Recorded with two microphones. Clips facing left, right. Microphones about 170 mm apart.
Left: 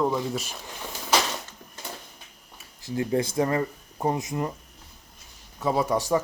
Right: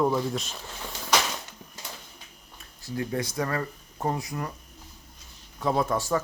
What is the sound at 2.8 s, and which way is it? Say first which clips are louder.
Speech: left 5 dB; 20° left (ahead or behind).